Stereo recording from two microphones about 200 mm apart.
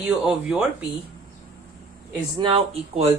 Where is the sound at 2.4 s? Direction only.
25° right (ahead or behind).